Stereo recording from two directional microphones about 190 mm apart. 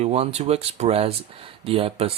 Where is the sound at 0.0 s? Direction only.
35° right (ahead or behind).